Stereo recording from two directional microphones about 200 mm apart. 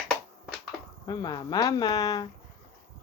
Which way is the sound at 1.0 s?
20° left (ahead or behind).